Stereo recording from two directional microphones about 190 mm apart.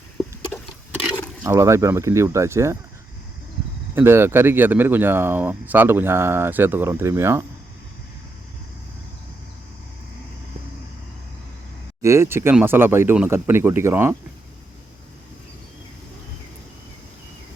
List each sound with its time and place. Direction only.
1.4 s speech: 15° right (ahead or behind)
3.9 s speech: 10° right (ahead or behind)
12.0 s speech: 15° right (ahead or behind)